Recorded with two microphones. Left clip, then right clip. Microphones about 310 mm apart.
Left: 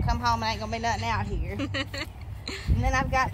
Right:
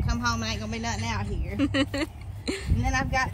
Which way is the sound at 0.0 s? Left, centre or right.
Left.